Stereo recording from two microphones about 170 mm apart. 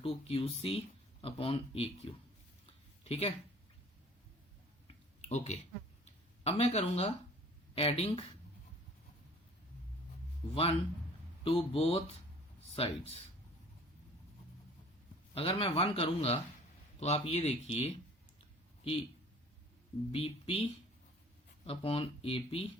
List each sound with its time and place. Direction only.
0.0 s speech: 35° left (ahead or behind)
2.6 s a sound: 35° left (ahead or behind)
5.3 s speech: 40° left (ahead or behind)
10.5 s speech: 35° left (ahead or behind)
15.4 s speech: 35° left (ahead or behind)
20.1 s speech: 35° left (ahead or behind)